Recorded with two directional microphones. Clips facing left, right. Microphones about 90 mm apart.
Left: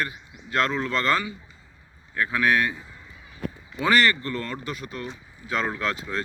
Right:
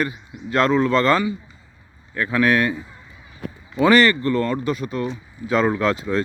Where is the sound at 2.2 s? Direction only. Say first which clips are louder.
Right 4 dB; 60° right (ahead or behind).